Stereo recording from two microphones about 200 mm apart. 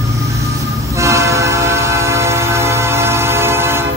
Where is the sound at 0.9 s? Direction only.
15° right (ahead or behind).